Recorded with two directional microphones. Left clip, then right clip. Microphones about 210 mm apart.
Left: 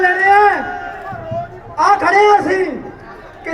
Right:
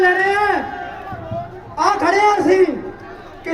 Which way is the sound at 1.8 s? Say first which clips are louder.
Left 4 dB; 35° right (ahead or behind).